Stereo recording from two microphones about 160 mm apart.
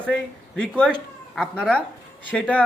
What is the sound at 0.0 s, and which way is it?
Speech, 5° left (ahead or behind).